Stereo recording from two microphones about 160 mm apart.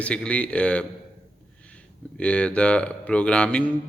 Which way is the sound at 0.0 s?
5° left (ahead or behind).